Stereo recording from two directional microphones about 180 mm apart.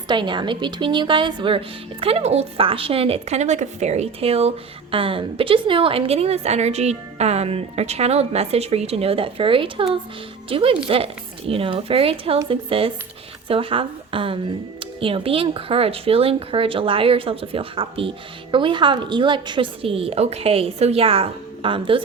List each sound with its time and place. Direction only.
0.1 s a woman's voice: 25° right (ahead or behind)